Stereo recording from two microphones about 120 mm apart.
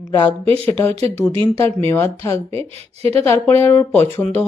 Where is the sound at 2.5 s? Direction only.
55° right (ahead or behind).